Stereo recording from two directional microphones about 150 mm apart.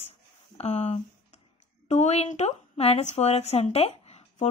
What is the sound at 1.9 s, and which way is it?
A woman's voice, 45° left (ahead or behind).